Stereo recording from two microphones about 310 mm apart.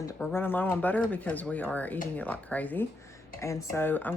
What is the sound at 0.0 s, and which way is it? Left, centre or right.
Speech, centre.